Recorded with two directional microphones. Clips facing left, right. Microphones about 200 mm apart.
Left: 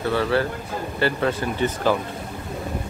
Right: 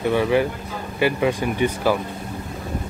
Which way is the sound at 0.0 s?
15° right (ahead or behind).